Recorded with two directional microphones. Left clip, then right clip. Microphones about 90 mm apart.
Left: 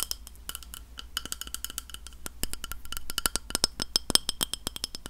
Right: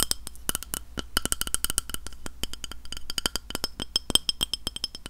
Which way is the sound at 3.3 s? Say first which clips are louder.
Left 3 dB; 25° left (ahead or behind).